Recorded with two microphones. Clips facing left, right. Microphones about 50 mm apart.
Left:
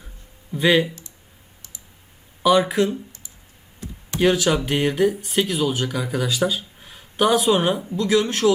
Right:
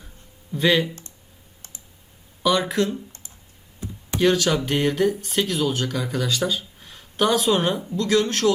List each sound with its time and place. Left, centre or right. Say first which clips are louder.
0.5 s speech: left 2 dB; centre
2.4 s speech: left 4 dB; centre
4.2 s speech: left 1 dB; centre